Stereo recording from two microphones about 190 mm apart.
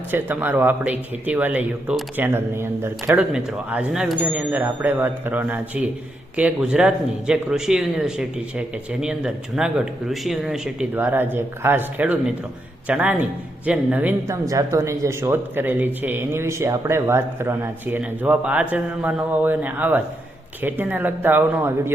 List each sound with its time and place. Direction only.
0.1 s speech: 10° right (ahead or behind)